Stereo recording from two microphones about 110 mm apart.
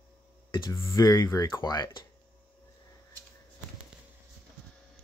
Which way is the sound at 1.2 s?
30° left (ahead or behind).